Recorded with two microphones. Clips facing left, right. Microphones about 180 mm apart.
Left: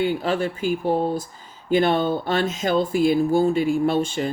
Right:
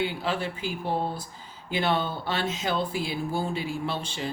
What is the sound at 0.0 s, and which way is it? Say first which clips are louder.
Speech: left 7 dB; 45° left (ahead or behind).